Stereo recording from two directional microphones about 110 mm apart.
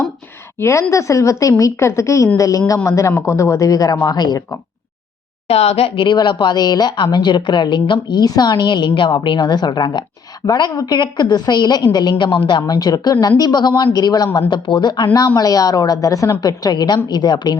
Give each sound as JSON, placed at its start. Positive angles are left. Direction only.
{"t": 0.6, "sound": "a woman's voice", "side_deg": 25}
{"t": 5.5, "sound": "a woman's voice", "side_deg": 65}